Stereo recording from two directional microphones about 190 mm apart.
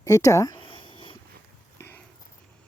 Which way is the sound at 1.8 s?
10° left (ahead or behind).